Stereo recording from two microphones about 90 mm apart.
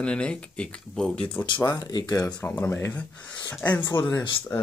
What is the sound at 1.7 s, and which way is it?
Speech, 45° left (ahead or behind).